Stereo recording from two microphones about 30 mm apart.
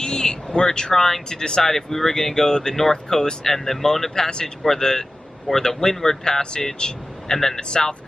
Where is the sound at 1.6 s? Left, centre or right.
Centre.